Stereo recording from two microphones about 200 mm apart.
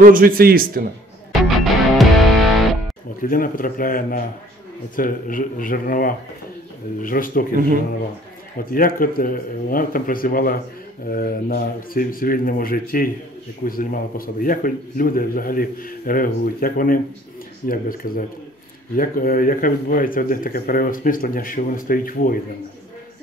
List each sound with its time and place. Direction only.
0.0 s a man's voice: 45° right (ahead or behind)
1.3 s music: centre (ahead or behind)
3.2 s speech: 45° left (ahead or behind)
8.6 s speech: 45° left (ahead or behind)